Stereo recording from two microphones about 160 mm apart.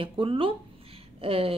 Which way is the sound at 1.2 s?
35° right (ahead or behind).